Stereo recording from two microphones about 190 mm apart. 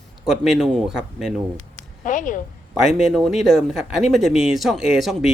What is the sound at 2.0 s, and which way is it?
Speech, 45° left (ahead or behind).